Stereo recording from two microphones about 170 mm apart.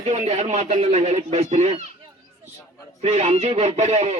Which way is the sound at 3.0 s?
40° right (ahead or behind).